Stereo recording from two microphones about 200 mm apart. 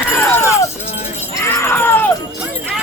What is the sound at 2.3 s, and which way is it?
Jingle bell, 5° right (ahead or behind).